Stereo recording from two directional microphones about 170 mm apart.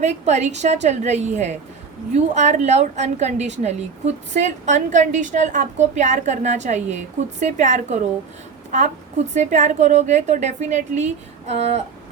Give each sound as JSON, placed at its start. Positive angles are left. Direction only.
{"t": 0.0, "sound": "a woman's voice", "side_deg": -40}
{"t": 9.3, "sound": "a woman's voice", "side_deg": -45}